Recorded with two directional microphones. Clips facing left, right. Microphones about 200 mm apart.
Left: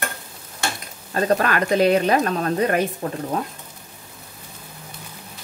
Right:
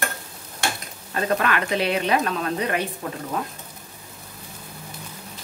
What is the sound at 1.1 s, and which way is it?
A woman's voice, 40° left (ahead or behind).